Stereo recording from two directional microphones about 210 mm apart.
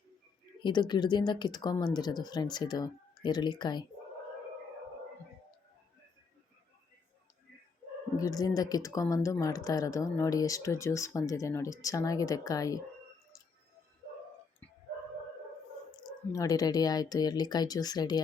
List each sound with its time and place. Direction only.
0.6 s speech: 20° left (ahead or behind)
8.1 s speech: 15° left (ahead or behind)
13.3 s squish: 15° left (ahead or behind)
16.0 s speech: 15° left (ahead or behind)